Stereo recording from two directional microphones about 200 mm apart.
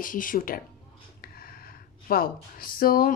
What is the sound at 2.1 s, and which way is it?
Speech, 50° left (ahead or behind).